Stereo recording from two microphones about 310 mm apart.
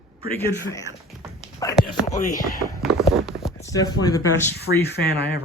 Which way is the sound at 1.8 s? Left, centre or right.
Centre.